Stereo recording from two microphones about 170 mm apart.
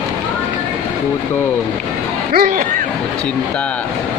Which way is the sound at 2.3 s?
60° right (ahead or behind).